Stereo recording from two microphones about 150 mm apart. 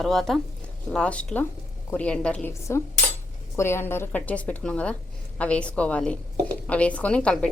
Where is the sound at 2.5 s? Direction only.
20° left (ahead or behind).